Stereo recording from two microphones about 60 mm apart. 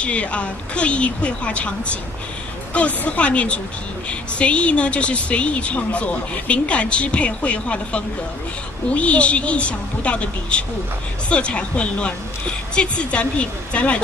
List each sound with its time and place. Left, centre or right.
0.0 s a woman's voice: left